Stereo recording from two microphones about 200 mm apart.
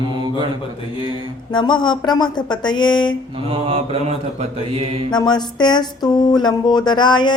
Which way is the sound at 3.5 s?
30° right (ahead or behind).